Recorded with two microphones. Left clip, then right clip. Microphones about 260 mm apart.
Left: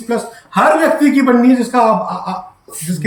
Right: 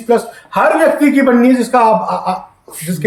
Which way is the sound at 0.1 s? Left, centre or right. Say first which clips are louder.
Right 5 dB; centre.